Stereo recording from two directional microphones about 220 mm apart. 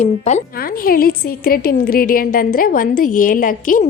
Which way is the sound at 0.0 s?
30° left (ahead or behind).